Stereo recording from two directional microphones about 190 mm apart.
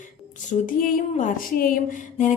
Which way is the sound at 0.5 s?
35° left (ahead or behind).